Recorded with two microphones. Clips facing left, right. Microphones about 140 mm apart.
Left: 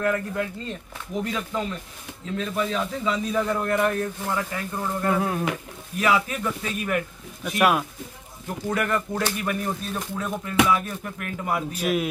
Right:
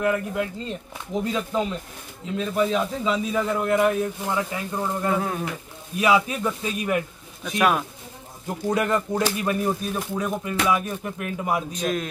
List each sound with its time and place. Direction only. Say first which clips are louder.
0.0 s speech: right 1 dB; 15° right (ahead or behind)
3.3 s speech: even; 5° right (ahead or behind); by 7.0 s 20° right (ahead or behind)
7.4 s speech: even; 5° left (ahead or behind)
8.5 s speech: right 3 dB; 20° right (ahead or behind)
11.7 s a man's voice: left 2 dB; 10° left (ahead or behind)